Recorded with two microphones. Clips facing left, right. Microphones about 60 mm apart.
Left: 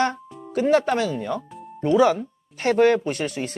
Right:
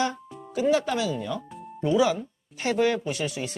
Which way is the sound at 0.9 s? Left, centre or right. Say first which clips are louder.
Left 4 dB; left.